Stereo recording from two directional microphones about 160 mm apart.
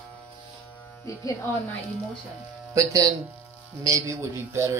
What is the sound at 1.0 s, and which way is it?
Speech, 20° left (ahead or behind).